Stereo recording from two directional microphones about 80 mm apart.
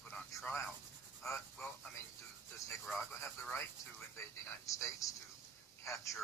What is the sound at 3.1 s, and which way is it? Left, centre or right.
Speech, left.